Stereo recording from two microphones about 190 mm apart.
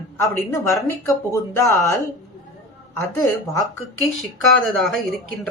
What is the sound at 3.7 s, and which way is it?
A woman's voice, 5° left (ahead or behind).